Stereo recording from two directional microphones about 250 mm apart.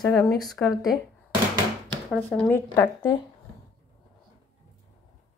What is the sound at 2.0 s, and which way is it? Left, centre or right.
Speech, centre.